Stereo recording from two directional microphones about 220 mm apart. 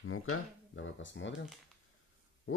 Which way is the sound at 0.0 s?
70° left (ahead or behind).